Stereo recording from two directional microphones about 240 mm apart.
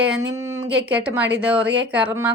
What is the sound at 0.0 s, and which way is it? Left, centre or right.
Speech, centre.